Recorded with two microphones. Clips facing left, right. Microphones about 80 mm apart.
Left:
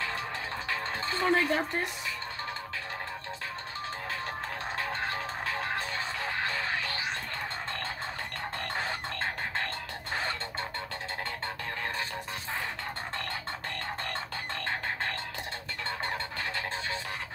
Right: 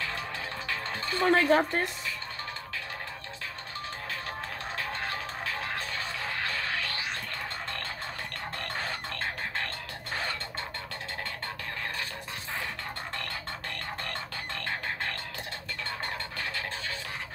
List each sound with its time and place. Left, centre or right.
1.2 s speech: right